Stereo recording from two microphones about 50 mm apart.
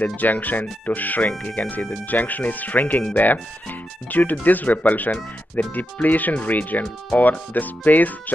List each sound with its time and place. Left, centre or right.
0.0 s speech: left